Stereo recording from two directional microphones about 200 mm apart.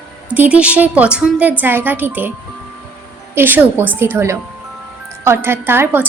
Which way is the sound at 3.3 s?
10° right (ahead or behind).